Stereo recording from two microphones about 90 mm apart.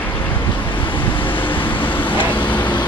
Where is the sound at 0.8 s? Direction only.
70° left (ahead or behind).